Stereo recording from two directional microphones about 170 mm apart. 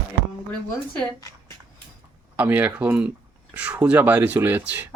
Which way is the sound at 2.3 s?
10° right (ahead or behind).